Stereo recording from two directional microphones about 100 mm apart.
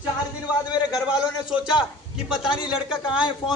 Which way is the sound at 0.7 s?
40° left (ahead or behind).